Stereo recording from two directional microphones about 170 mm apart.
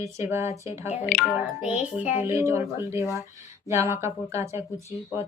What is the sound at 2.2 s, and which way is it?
A woman's voice, 15° right (ahead or behind).